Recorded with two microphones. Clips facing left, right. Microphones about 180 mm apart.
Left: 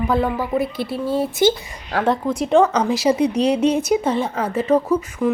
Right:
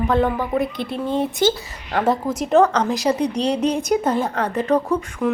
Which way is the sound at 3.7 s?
Centre (ahead or behind).